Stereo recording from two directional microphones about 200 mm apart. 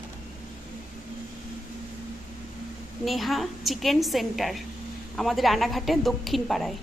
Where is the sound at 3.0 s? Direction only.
Centre (ahead or behind).